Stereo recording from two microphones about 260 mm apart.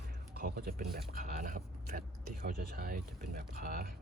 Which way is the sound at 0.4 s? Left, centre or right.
Right.